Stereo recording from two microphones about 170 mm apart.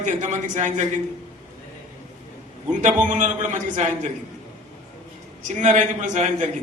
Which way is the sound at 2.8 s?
50° right (ahead or behind).